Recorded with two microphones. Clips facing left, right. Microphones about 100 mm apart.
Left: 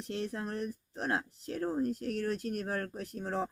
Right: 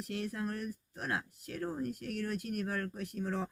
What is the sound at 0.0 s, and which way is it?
Speech, 30° left (ahead or behind).